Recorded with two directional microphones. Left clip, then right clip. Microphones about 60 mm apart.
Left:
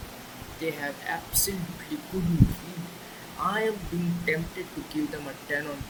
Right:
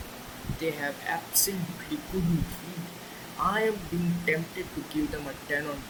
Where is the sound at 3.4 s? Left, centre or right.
Centre.